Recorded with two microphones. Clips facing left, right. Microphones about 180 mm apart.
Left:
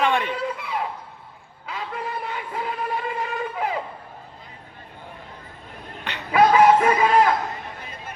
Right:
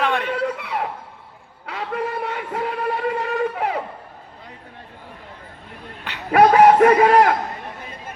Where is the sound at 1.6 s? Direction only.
65° right (ahead or behind).